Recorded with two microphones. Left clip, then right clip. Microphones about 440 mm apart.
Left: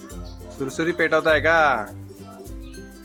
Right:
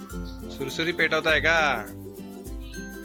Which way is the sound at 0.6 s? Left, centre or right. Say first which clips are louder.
Left 3 dB; right.